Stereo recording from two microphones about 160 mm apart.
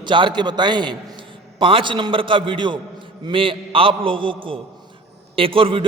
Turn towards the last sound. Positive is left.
turn(degrees=-35)  # may be behind; listen again after turning